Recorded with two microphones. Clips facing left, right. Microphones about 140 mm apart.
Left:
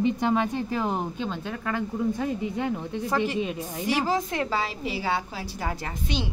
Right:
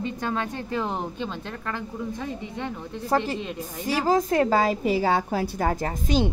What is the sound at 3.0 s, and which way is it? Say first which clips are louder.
A woman's voice: right 2 dB; 40° right (ahead or behind).